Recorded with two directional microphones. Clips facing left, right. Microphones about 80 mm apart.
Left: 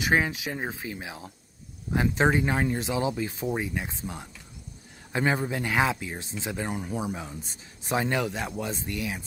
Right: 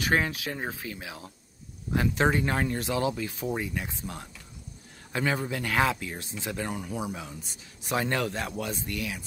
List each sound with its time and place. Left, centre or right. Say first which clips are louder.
0.0 s speech: left 2 dB; centre
5.1 s speech: left 2 dB; left
6.8 s speech: left 2 dB; left
8.0 s speech: left 1 dB; centre